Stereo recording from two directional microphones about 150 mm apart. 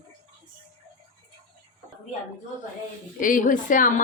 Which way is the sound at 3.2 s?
60° left (ahead or behind).